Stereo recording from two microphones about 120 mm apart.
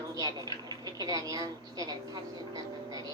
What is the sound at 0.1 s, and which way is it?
A woman's voice, 30° right (ahead or behind).